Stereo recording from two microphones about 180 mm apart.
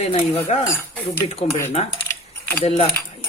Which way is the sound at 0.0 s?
35° left (ahead or behind).